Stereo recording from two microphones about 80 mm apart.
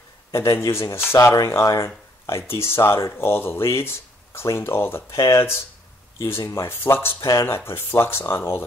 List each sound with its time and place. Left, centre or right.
0.3 s speech: left
7.2 s speech: left
7.4 s speech: left